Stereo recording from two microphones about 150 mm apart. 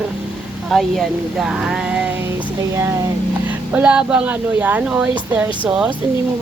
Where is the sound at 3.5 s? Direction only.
10° right (ahead or behind).